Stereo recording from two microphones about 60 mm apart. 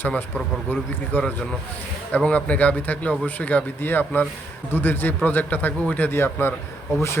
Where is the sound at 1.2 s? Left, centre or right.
Centre.